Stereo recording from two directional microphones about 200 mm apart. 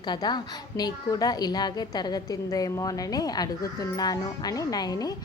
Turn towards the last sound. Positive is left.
turn(degrees=20)  # may be behind; listen again after turning